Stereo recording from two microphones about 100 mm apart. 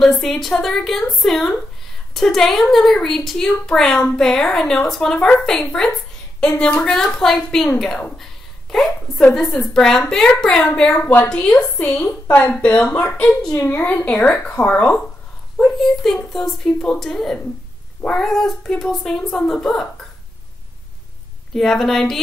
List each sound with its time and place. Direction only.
0.0 s a woman's voice: 5° left (ahead or behind)
13.7 s a woman's voice: 20° left (ahead or behind)
15.5 s speech: 5° left (ahead or behind)
21.5 s speech: centre (ahead or behind)